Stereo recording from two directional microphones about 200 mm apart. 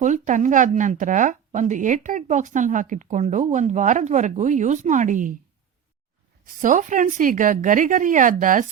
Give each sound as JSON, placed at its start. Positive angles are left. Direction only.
{"t": 0.0, "sound": "speech", "side_deg": -40}
{"t": 6.4, "sound": "speech", "side_deg": -40}